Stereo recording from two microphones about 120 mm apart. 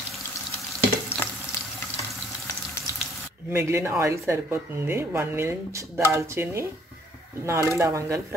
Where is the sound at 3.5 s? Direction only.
20° right (ahead or behind).